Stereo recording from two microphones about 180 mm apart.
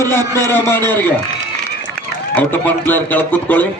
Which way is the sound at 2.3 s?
10° left (ahead or behind).